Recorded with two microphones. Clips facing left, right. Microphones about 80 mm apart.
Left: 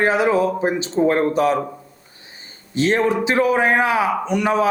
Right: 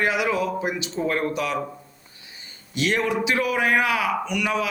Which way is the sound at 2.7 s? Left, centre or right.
Left.